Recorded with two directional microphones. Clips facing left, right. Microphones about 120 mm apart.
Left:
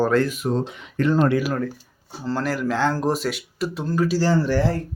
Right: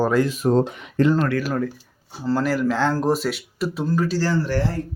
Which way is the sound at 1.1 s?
20° left (ahead or behind).